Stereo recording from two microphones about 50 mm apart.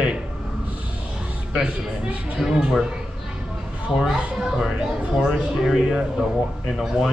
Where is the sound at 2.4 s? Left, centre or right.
Centre.